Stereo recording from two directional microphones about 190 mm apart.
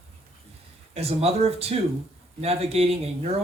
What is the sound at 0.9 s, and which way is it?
Speech, 30° right (ahead or behind).